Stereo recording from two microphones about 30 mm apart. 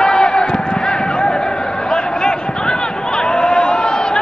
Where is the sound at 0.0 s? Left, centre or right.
Left.